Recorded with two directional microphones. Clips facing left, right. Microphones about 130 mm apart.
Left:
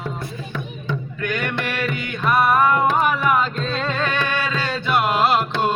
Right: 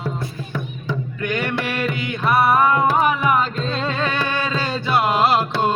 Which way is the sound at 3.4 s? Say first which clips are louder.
Even; centre (ahead or behind).